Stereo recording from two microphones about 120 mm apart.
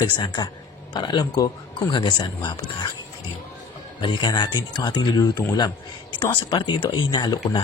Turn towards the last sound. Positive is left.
turn(degrees=35)  # may be behind; listen again after turning